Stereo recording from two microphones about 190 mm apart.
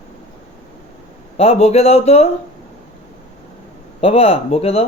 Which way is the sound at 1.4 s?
35° left (ahead or behind).